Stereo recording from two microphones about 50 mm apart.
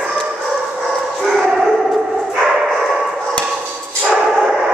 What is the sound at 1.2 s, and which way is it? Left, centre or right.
Dog, centre.